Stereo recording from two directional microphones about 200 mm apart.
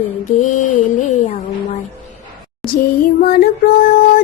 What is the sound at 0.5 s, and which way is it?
Female singing, 40° left (ahead or behind).